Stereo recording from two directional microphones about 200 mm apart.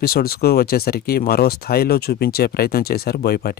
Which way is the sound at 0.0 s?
50° left (ahead or behind).